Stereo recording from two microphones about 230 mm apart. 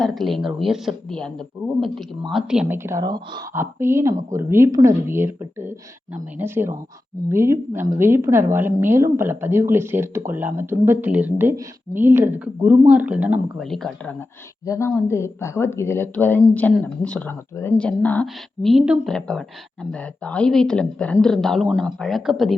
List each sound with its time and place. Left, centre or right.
0.0 s speech: centre
2.3 s a woman's voice: centre